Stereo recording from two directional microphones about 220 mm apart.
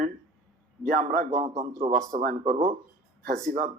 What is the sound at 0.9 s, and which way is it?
A man's voice, 35° right (ahead or behind).